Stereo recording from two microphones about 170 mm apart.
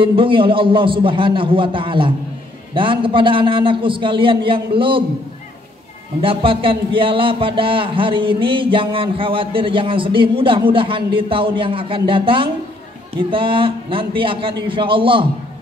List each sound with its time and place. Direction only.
0.0 s a man's voice: 30° right (ahead or behind)
6.2 s a sound: 30° right (ahead or behind)
10.7 s a man's voice: 30° right (ahead or behind)